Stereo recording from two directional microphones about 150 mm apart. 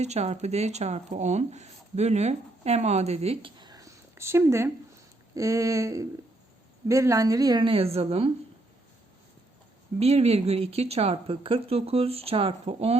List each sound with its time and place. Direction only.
0.0 s speech: 45° right (ahead or behind)
3.6 s a sound: 25° right (ahead or behind)
5.3 s a woman's voice: 20° right (ahead or behind); by 8.3 s 40° right (ahead or behind)
10.0 s speech: 45° right (ahead or behind)